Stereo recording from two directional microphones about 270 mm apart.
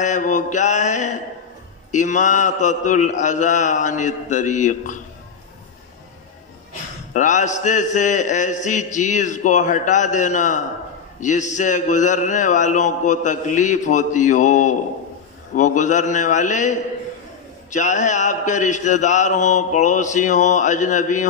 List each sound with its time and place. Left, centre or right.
0.0 s a man's voice: left
7.2 s a man's voice: left